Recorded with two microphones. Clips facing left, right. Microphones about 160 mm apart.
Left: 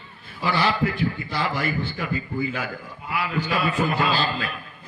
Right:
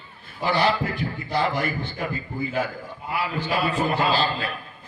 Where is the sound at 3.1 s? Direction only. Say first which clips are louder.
Even; 35° right (ahead or behind).